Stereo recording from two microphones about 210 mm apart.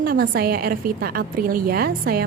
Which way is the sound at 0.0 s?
45° right (ahead or behind).